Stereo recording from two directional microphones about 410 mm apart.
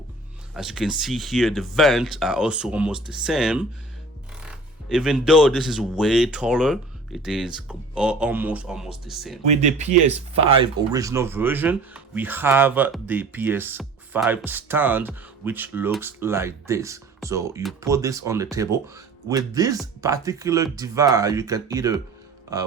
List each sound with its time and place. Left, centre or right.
0.5 s speech: centre
9.5 s speech: centre